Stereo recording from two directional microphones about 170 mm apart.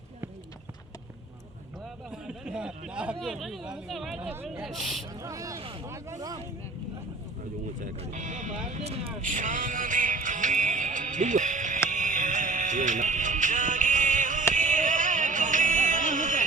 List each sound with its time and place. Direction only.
2.2 s speech: 5° right (ahead or behind)
5.2 s speech: 20° right (ahead or behind)
7.8 s speech: 50° right (ahead or behind)
11.9 s music: 50° right (ahead or behind)
14.5 s a sound: 50° right (ahead or behind)